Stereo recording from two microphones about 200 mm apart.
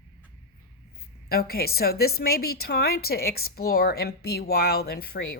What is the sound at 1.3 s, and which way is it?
Speech, 50° left (ahead or behind).